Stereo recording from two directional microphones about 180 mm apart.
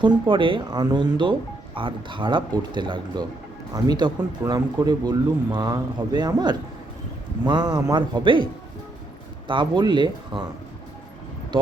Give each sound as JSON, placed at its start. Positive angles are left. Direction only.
{"t": 0.0, "sound": "speech", "side_deg": -25}
{"t": 9.5, "sound": "speech", "side_deg": -25}